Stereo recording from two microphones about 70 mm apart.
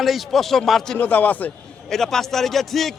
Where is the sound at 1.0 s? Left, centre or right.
Left.